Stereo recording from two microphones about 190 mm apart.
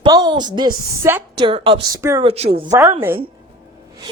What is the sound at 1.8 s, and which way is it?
Speech, 15° right (ahead or behind).